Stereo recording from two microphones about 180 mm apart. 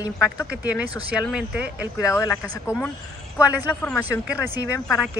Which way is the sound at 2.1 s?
15° left (ahead or behind).